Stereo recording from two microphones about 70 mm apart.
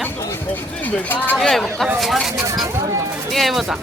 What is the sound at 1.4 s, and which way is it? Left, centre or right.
Speech, centre.